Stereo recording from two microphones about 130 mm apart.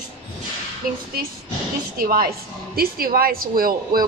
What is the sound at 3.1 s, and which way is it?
Speech, 90° right.